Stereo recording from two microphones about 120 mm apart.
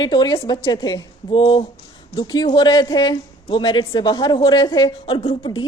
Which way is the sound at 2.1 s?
35° left (ahead or behind).